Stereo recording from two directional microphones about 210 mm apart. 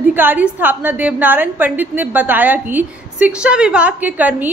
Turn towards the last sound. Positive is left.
turn(degrees=-10)  # may be behind; listen again after turning